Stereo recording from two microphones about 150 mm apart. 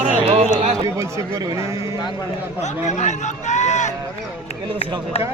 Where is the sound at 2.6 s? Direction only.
50° left (ahead or behind).